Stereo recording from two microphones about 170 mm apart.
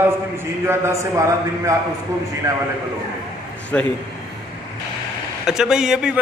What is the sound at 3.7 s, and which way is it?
Speech, 10° left (ahead or behind).